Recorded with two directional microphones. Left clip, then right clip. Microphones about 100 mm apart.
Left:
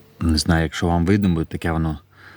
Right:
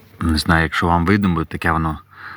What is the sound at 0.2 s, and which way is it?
Speech, 35° left (ahead or behind).